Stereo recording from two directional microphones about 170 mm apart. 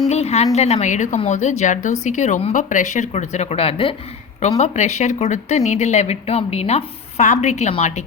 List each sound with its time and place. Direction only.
0.1 s a woman's voice: 40° left (ahead or behind)